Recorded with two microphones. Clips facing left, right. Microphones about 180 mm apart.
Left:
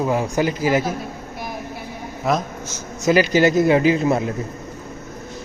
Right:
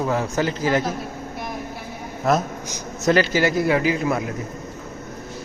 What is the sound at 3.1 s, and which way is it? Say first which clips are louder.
Speech: left 3 dB; 15° left (ahead or behind).